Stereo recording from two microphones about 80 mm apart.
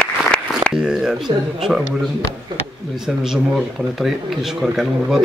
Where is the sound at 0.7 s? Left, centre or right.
Centre.